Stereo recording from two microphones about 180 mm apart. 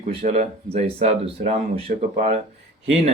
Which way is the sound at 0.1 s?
35° right (ahead or behind).